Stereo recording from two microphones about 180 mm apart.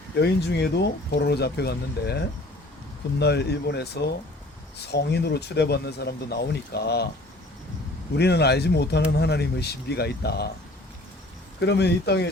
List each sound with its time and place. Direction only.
0.2 s speech: 70° left (ahead or behind)
8.1 s speech: 65° left (ahead or behind)
11.6 s speech: 70° left (ahead or behind)